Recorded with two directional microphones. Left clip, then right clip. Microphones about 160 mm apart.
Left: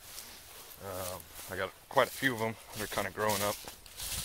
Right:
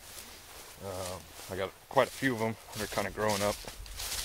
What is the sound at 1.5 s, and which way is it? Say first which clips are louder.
Speech: right 1 dB; 25° right (ahead or behind).